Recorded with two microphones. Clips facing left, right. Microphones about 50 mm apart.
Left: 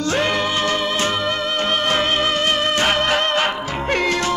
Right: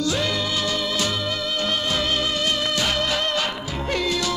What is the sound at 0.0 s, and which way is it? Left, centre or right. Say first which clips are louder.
Music: left 4 dB; left.